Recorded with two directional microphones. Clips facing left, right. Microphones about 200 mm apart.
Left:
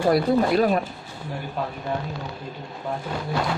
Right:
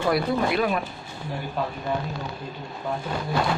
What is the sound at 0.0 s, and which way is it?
Speech, 40° left (ahead or behind).